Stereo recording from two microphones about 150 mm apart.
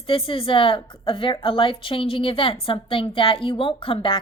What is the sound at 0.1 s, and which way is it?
A woman's voice, 35° left (ahead or behind).